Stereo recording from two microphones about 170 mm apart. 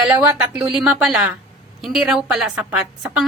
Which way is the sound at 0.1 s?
10° right (ahead or behind).